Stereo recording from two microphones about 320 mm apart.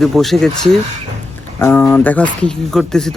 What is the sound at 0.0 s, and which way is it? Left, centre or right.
A man's voice, centre.